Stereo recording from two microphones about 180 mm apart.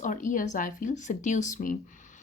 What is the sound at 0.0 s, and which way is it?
Speech, 45° left (ahead or behind).